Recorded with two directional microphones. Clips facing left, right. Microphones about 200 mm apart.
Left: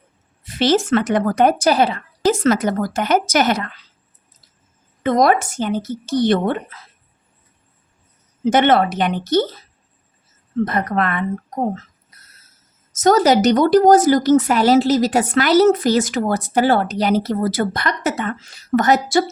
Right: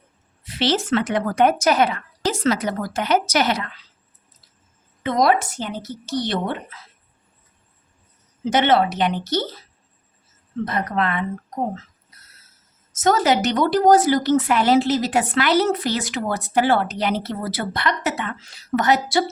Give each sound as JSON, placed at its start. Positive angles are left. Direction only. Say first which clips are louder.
{"t": 0.4, "sound": "speech", "louder": "left 5 dB", "side_deg": 45}
{"t": 2.3, "sound": "speech", "louder": "left 3 dB", "side_deg": 50}
{"t": 5.0, "sound": "speech", "louder": "left 3 dB", "side_deg": 50}
{"t": 8.4, "sound": "speech", "louder": "left 3 dB", "side_deg": 50}
{"t": 10.7, "sound": "speech", "louder": "left 3 dB", "side_deg": 50}
{"t": 12.9, "sound": "speech", "louder": "left 5 dB", "side_deg": 40}